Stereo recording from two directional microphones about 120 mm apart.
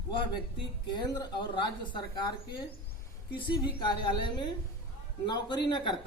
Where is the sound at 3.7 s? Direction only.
45° left (ahead or behind).